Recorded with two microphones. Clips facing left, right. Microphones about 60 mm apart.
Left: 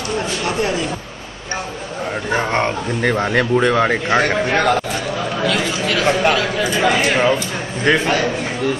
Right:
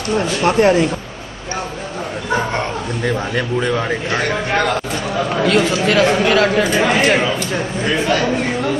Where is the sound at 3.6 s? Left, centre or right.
Left.